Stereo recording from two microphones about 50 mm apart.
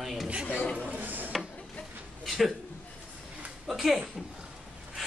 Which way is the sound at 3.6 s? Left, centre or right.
Centre.